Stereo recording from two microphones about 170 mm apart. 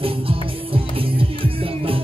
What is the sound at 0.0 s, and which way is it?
Music, 35° right (ahead or behind).